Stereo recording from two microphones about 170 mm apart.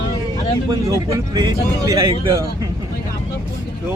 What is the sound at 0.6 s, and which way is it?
A man's voice, 25° right (ahead or behind).